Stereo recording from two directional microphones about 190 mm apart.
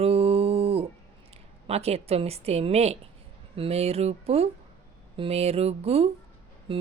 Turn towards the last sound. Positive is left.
turn(degrees=-30)  # may be behind; listen again after turning